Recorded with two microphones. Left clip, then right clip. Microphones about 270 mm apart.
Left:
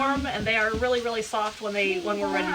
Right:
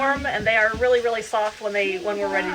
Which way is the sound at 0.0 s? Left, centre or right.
Centre.